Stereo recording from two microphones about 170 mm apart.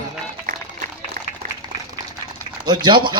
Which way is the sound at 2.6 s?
25° right (ahead or behind).